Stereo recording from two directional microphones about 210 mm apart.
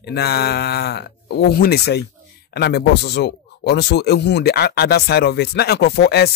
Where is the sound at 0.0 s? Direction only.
50° left (ahead or behind).